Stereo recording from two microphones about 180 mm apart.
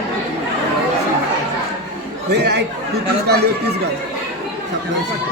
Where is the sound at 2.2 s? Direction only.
65° right (ahead or behind).